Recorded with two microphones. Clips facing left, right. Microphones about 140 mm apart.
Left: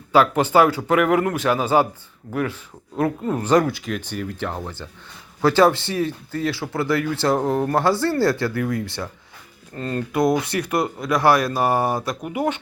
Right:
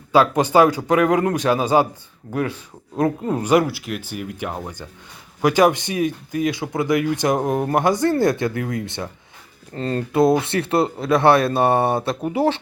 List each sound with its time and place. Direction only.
0.1 s speech: 15° right (ahead or behind); by 12.5 s 30° right (ahead or behind)